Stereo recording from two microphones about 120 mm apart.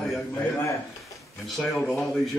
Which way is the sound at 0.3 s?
15° left (ahead or behind).